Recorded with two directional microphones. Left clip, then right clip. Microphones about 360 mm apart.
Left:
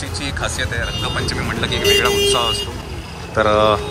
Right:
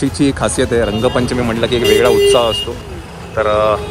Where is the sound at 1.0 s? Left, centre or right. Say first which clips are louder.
Right 7 dB; centre.